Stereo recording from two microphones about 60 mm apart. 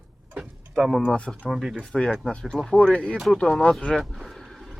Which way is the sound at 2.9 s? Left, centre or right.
Centre.